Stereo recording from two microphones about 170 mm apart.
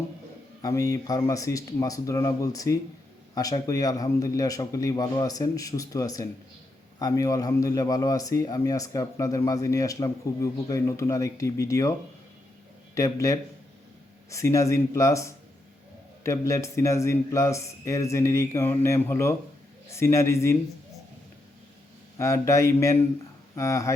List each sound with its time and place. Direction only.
0.6 s a man's voice: 20° left (ahead or behind)
22.2 s speech: 15° left (ahead or behind)